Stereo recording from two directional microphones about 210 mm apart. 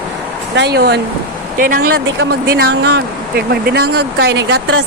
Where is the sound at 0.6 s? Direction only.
50° right (ahead or behind).